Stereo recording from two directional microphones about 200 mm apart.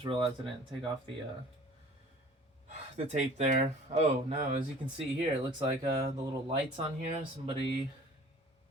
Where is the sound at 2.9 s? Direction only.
35° right (ahead or behind).